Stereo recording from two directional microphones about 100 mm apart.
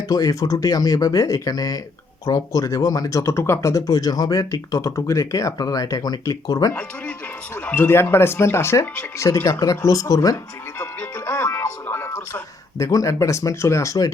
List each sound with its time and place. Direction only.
0.1 s speech: 35° left (ahead or behind)
7.5 s speech: 20° left (ahead or behind); by 10.3 s 35° left (ahead or behind)
11.3 s music: 25° left (ahead or behind)
12.8 s speech: 35° left (ahead or behind)